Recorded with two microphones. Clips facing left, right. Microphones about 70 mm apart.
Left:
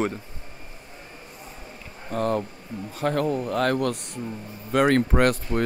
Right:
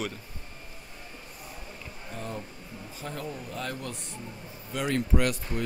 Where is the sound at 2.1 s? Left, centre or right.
Left.